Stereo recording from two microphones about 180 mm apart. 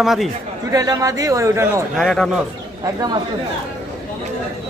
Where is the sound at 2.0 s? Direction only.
Centre (ahead or behind).